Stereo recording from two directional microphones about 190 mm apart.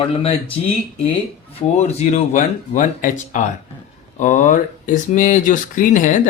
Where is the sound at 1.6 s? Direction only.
35° left (ahead or behind).